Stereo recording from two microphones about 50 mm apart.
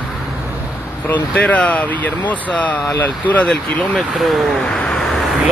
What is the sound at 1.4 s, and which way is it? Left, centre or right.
Speech, left.